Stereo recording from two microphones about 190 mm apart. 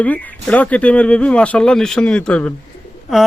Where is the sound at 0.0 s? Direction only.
5° left (ahead or behind).